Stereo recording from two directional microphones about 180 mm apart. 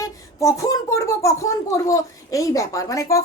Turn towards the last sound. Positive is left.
turn(degrees=15)  # may be behind; listen again after turning